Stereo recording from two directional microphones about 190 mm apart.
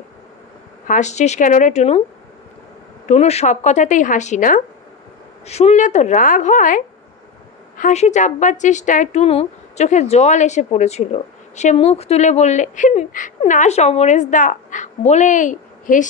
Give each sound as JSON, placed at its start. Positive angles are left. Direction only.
{"t": 0.8, "sound": "a woman's voice", "side_deg": 40}
{"t": 3.1, "sound": "a woman's voice", "side_deg": 35}